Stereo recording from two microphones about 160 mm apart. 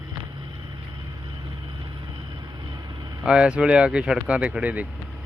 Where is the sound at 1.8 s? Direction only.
25° right (ahead or behind).